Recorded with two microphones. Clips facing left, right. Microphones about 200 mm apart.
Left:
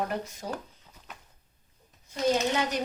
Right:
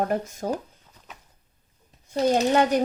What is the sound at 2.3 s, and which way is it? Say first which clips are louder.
Speech: right 7 dB; 50° right (ahead or behind).